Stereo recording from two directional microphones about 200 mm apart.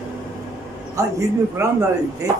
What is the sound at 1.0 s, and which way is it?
Speech, 15° right (ahead or behind).